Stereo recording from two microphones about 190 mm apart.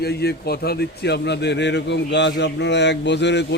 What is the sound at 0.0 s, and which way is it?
A man's voice, 60° left (ahead or behind).